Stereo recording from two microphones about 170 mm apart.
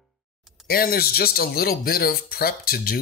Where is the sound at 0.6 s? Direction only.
60° left (ahead or behind).